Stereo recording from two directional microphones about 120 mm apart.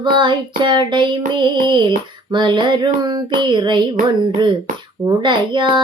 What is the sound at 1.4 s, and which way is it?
Female singing, 40° right (ahead or behind).